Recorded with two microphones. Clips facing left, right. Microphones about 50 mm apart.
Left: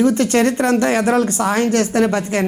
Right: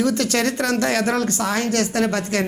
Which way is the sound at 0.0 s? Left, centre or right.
Left.